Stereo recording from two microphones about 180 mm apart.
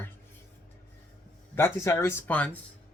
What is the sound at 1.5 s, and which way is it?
Speech, 15° left (ahead or behind).